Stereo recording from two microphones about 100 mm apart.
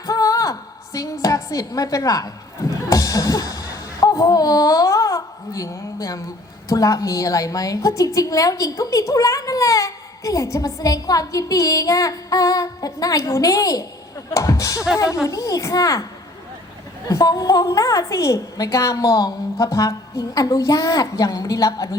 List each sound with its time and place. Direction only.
0.0 s a sound: 35° left (ahead or behind)
4.0 s speech: 35° left (ahead or behind)
17.1 s speech: 35° left (ahead or behind)